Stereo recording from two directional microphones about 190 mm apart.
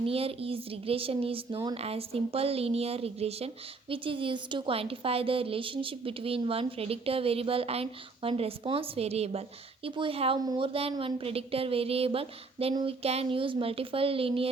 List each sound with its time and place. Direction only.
0.0 s speech: 30° right (ahead or behind)